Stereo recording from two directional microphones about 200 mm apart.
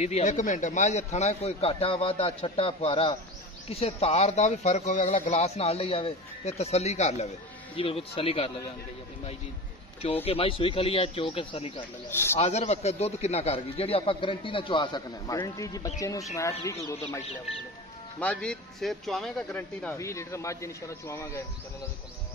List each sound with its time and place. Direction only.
0.0 s a man's voice: 35° left (ahead or behind)
10.0 s a man's voice: 30° left (ahead or behind)
12.1 s a man's voice: 10° left (ahead or behind)
12.4 s a man's voice: 35° left (ahead or behind); by 16.7 s 15° left (ahead or behind)
18.2 s a man's voice: 5° left (ahead or behind)